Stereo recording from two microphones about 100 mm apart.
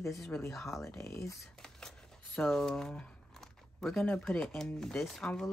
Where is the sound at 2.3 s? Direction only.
5° left (ahead or behind).